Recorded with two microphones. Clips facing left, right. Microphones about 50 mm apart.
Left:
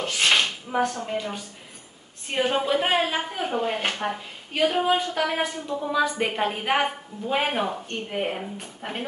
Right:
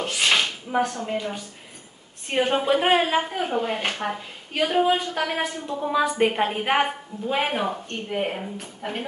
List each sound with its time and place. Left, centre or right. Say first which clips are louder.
0.1 s a sound: left 1 dB; centre
1.0 s a woman's voice: right 1 dB; centre
2.6 s a woman's voice: right 3 dB; centre
3.3 s a woman's voice: right 1 dB; centre
5.7 s a woman's voice: right 2 dB; centre